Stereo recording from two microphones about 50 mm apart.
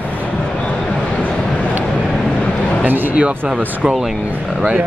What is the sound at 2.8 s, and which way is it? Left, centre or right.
Speech, right.